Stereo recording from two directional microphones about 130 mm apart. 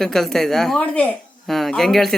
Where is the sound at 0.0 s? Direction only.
5° left (ahead or behind).